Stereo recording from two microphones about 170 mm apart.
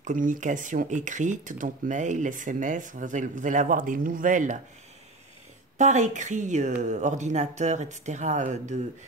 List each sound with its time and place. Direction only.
0.0 s speech: 50° right (ahead or behind)
5.8 s speech: 45° right (ahead or behind)